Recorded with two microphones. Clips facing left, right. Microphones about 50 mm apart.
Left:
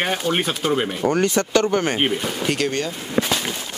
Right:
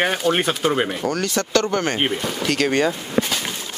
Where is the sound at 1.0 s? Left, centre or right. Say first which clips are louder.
Left 3 dB; left.